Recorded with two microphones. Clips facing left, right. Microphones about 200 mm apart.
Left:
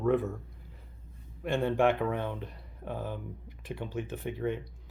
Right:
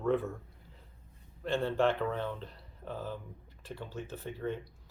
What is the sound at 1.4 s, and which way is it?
Speech, 15° left (ahead or behind).